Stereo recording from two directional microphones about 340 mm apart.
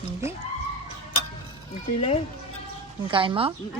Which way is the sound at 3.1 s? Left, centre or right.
Centre.